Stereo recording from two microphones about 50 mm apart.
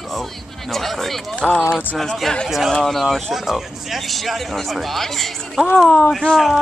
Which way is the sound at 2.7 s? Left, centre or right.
Centre.